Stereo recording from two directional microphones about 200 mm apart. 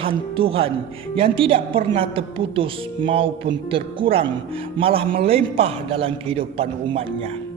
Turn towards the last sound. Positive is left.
turn(degrees=-30)  # may be behind; listen again after turning